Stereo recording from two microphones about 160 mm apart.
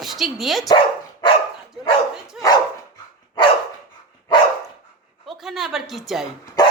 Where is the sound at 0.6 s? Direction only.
25° left (ahead or behind).